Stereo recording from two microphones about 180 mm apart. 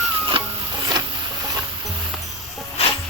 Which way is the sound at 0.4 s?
30° right (ahead or behind).